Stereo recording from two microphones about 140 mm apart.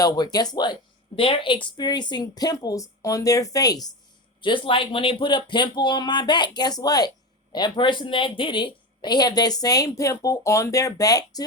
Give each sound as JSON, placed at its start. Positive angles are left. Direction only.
{"t": 0.0, "sound": "a woman's voice", "side_deg": 30}